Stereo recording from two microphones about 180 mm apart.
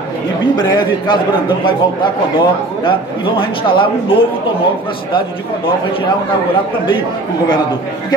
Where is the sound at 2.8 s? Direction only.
25° left (ahead or behind).